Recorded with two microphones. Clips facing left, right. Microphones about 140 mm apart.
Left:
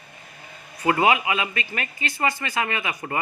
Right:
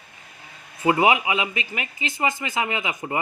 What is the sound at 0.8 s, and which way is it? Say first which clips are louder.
Speech: right 1 dB; 20° right (ahead or behind).